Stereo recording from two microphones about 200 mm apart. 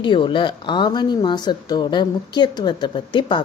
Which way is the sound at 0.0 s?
25° left (ahead or behind).